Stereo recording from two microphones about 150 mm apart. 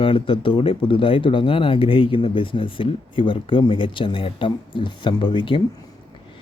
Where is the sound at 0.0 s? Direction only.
35° left (ahead or behind).